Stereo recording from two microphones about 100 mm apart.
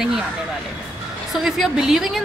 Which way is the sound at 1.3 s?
5° right (ahead or behind).